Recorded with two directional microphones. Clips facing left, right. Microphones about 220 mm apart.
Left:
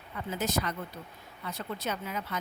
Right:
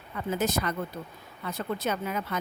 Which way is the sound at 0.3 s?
50° right (ahead or behind).